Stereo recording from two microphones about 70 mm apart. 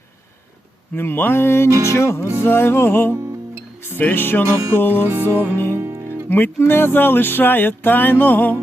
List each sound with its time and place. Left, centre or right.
0.9 s music: left
4.4 s music: right
4.8 s music: left
5.0 s music: right
5.5 s music: left